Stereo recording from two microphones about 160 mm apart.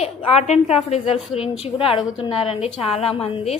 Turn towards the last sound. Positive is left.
turn(degrees=40)  # may be behind; listen again after turning